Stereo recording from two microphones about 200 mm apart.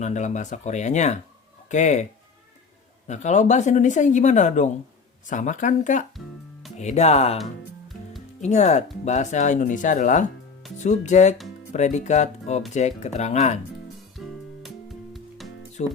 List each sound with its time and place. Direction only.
0.0 s speech: 35° left (ahead or behind)
3.1 s speech: 35° left (ahead or behind)
8.4 s speech: 35° left (ahead or behind)
14.6 s music: centre (ahead or behind)
15.8 s speech: 35° left (ahead or behind)